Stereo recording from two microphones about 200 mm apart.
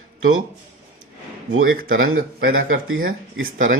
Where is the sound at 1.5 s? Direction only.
85° right.